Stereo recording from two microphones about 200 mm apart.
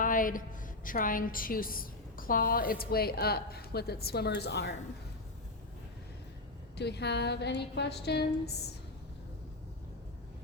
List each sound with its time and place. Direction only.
0.0 s a woman's voice: 40° left (ahead or behind)
6.7 s a woman's voice: 55° left (ahead or behind)